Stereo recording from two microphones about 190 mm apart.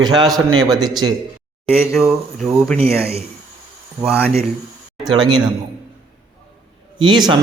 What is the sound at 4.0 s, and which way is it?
Speech, 10° right (ahead or behind).